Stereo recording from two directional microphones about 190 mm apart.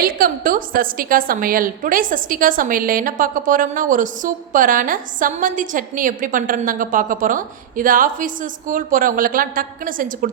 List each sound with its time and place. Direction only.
0.0 s a woman's voice: 50° right (ahead or behind)